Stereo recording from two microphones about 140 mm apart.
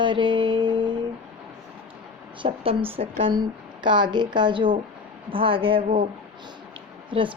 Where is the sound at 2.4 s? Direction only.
40° right (ahead or behind).